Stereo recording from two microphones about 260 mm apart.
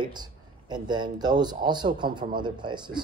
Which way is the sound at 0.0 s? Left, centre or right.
Centre.